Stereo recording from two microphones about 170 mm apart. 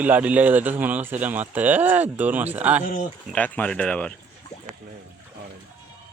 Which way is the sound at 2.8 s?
50° left (ahead or behind).